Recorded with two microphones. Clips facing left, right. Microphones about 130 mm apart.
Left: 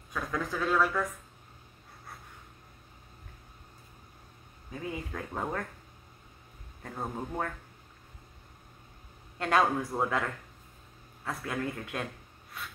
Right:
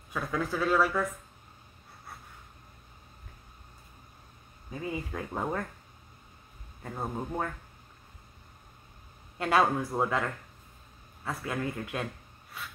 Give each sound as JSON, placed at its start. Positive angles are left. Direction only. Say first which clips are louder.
{"t": 0.1, "sound": "speech", "louder": "right 2 dB", "side_deg": -5}
{"t": 4.6, "sound": "speech", "louder": "right 2 dB", "side_deg": -5}
{"t": 6.8, "sound": "a man's voice", "louder": "right 1 dB", "side_deg": -5}
{"t": 9.4, "sound": "speech", "louder": "right 1 dB", "side_deg": -5}